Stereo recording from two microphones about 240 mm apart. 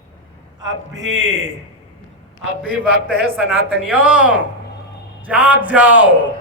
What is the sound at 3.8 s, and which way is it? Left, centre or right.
A man's voice, centre.